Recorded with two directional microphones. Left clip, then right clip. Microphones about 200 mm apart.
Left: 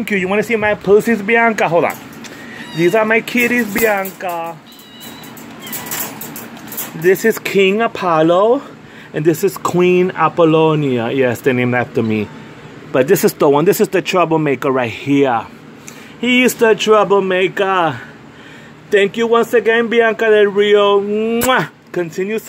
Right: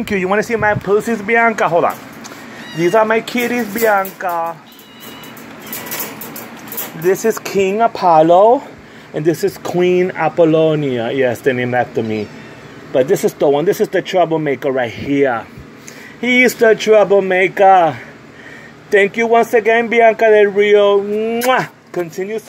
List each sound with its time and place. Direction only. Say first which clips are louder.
0.0 s speech: even; 5° right (ahead or behind)
0.6 s speech: left 1 dB; 15° left (ahead or behind)
0.9 s speech: left 3 dB; 25° left (ahead or behind)
1.3 s speech: right 1 dB; 15° left (ahead or behind)
3.3 s speech: left 3 dB; 5° left (ahead or behind)
7.4 s speech: even; 20° left (ahead or behind)
7.9 s speech: right 3 dB; 5° left (ahead or behind)
9.1 s speech: left 1 dB; 15° left (ahead or behind)